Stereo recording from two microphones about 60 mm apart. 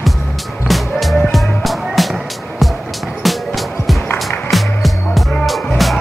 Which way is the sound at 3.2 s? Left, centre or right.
Centre.